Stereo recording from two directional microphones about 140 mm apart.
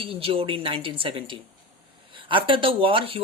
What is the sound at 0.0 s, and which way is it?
Speech, 40° right (ahead or behind).